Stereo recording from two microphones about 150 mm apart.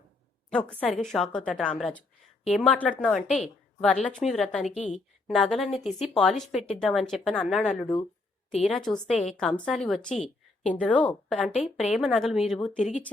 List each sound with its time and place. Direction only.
0.5 s a woman's voice: 10° left (ahead or behind)
10.2 s a sound: 55° left (ahead or behind)
10.8 s speech: 10° left (ahead or behind)
12.7 s speech: 50° left (ahead or behind)